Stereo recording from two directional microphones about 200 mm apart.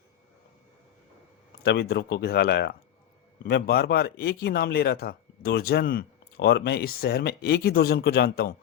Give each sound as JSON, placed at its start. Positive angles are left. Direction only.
{"t": 1.6, "sound": "speech", "side_deg": 55}